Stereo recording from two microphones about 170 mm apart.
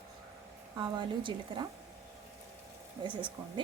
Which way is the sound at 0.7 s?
25° right (ahead or behind).